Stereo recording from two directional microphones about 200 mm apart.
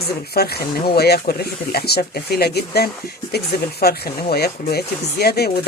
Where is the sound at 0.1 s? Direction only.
50° left (ahead or behind).